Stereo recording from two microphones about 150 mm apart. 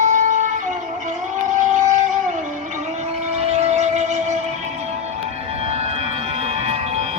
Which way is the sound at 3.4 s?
45° right (ahead or behind).